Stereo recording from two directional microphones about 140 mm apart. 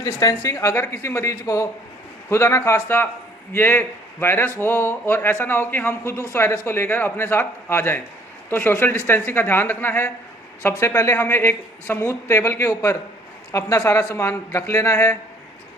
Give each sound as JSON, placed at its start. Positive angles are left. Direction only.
{"t": 0.0, "sound": "speech", "side_deg": 25}